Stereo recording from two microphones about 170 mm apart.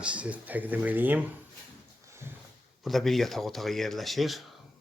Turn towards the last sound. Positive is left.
turn(degrees=0)  # may be behind; listen again after turning